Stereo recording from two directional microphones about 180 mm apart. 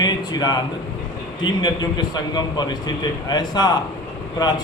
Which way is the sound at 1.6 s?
25° left (ahead or behind).